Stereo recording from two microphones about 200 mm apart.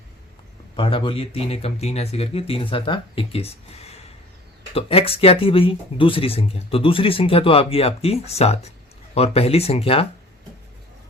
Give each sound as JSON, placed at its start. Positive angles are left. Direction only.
{"t": 0.8, "sound": "speech", "side_deg": 25}